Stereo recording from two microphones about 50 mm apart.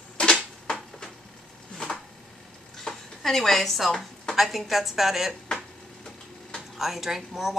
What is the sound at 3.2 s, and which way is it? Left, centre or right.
Speech, centre.